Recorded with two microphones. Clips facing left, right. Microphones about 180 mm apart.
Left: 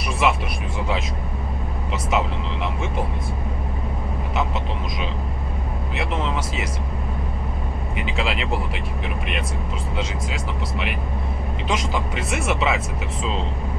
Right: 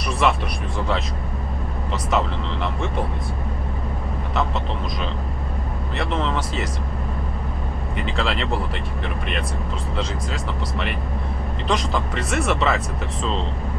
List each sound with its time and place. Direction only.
0.2 s speech: 5° left (ahead or behind)
5.9 s speech: centre (ahead or behind)
8.0 s speech: centre (ahead or behind)
9.9 s speech: centre (ahead or behind)